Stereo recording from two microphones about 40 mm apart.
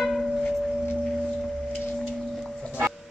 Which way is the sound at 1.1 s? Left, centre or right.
Centre.